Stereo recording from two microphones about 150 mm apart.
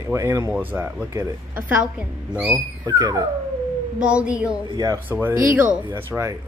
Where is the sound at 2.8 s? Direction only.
25° right (ahead or behind).